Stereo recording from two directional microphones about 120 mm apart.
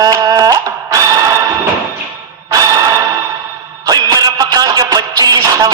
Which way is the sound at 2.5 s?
30° right (ahead or behind).